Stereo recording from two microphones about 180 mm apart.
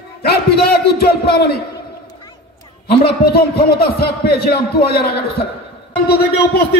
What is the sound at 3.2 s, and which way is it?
A man's voice, 60° left (ahead or behind).